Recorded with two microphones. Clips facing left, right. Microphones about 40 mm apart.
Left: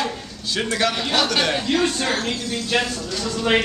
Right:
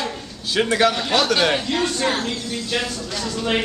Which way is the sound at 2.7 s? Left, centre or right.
Centre.